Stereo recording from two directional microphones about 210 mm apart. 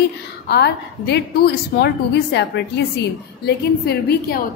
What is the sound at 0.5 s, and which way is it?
A woman's voice, 50° left (ahead or behind).